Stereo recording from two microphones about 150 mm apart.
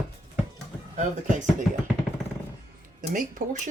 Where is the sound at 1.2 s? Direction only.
60° right (ahead or behind).